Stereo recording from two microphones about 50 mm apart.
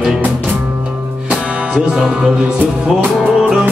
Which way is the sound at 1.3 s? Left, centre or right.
Right.